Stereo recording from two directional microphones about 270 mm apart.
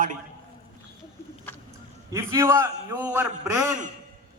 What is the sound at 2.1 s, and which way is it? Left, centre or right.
A man's voice, centre.